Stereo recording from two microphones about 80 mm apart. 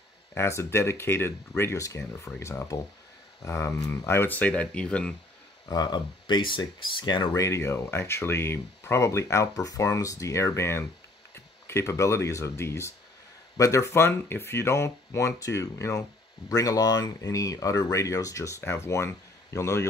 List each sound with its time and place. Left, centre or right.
0.3 s speech: left
1.8 s speech: left
4.4 s speech: centre
5.7 s speech: left
7.3 s speech: left
11.8 s speech: left